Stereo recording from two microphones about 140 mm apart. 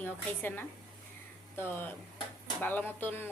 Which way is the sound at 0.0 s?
15° left (ahead or behind).